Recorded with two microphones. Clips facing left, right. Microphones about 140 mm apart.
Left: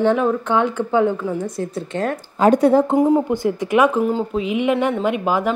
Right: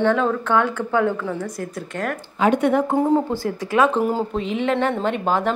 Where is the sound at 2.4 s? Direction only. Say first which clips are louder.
Left 4 dB; 35° left (ahead or behind).